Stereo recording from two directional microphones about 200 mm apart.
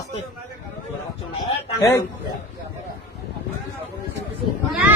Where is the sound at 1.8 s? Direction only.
15° left (ahead or behind).